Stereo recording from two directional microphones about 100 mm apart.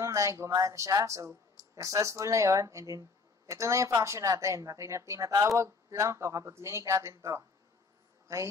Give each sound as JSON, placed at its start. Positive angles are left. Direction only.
{"t": 0.0, "sound": "speech", "side_deg": -35}